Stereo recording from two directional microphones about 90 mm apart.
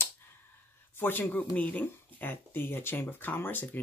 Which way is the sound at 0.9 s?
25° left (ahead or behind).